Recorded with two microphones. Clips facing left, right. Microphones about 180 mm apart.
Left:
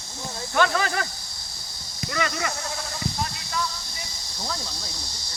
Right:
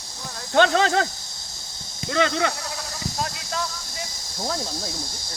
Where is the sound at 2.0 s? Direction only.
90° right.